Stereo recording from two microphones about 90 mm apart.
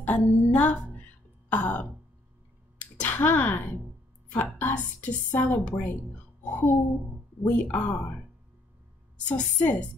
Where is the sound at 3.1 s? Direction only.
20° left (ahead or behind).